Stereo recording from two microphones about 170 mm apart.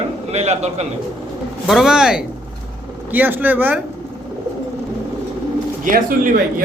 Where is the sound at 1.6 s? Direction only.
5° right (ahead or behind).